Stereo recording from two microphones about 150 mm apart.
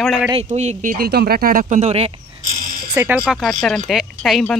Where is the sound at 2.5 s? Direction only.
65° right (ahead or behind).